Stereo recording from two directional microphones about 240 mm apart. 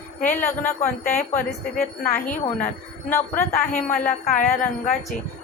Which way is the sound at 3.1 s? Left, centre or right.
Centre.